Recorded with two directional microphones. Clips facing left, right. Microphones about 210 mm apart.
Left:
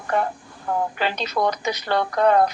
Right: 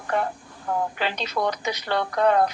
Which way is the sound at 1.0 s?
45° left (ahead or behind).